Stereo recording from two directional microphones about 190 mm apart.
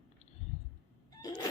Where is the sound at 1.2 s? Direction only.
20° left (ahead or behind).